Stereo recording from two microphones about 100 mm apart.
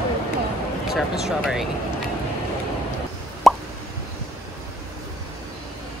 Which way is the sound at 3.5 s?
Centre (ahead or behind).